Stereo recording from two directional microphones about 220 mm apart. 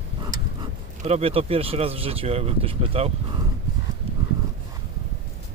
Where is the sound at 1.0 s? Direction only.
25° right (ahead or behind).